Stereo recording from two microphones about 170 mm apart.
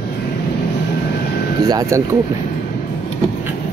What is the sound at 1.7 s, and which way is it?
Speech, 20° right (ahead or behind).